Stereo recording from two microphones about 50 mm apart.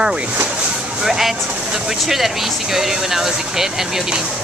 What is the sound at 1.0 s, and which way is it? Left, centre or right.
Speech, centre.